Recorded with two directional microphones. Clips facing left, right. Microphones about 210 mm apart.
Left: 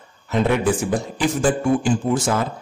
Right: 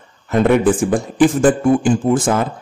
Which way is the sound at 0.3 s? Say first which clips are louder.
Right 6 dB; 50° right (ahead or behind).